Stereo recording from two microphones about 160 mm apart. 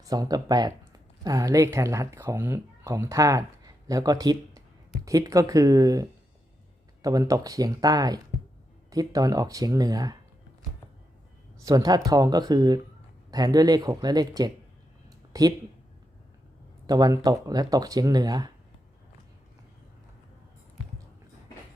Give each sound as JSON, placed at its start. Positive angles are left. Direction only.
{"t": 0.0, "sound": "speech", "side_deg": -25}
{"t": 11.6, "sound": "speech", "side_deg": -20}
{"t": 16.8, "sound": "speech", "side_deg": -25}